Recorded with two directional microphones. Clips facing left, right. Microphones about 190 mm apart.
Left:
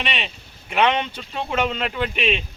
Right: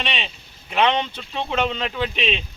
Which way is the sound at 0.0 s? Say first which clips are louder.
Even; 5° left (ahead or behind).